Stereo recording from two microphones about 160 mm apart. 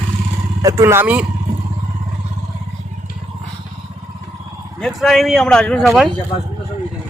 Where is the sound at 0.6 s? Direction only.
20° right (ahead or behind).